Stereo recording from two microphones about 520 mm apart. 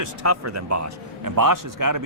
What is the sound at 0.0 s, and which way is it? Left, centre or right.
Speech, right.